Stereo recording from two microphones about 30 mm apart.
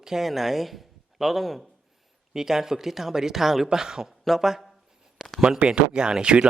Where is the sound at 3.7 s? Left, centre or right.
Right.